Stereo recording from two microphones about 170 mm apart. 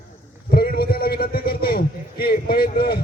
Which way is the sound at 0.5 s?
65° left (ahead or behind).